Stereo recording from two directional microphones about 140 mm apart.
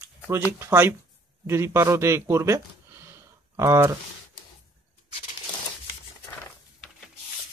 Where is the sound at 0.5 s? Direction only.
20° right (ahead or behind).